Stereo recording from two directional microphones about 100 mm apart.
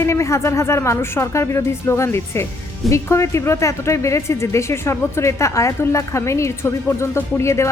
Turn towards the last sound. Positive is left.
turn(degrees=30)  # may be behind; listen again after turning